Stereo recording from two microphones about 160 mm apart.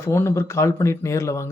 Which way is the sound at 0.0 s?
15° left (ahead or behind).